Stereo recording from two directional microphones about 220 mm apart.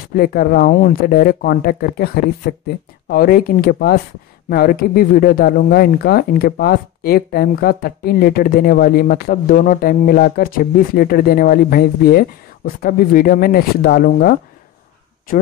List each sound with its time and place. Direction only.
0.1 s speech: 40° left (ahead or behind)